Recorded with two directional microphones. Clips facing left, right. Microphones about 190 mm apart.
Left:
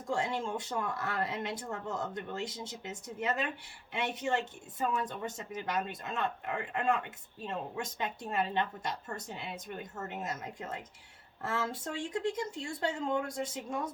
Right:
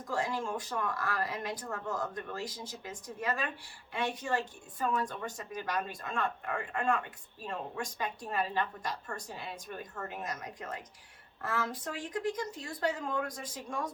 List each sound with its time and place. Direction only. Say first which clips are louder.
0.0 s speech: left 1 dB; 25° left (ahead or behind)